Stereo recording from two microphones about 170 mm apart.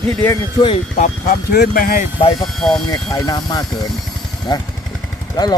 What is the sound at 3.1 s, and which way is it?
Speech, 25° left (ahead or behind).